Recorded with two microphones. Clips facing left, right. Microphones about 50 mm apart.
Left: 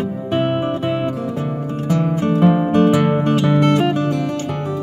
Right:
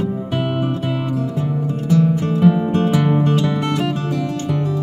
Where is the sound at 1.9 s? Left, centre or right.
Left.